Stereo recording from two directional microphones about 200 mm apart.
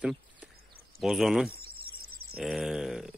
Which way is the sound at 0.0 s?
5° right (ahead or behind).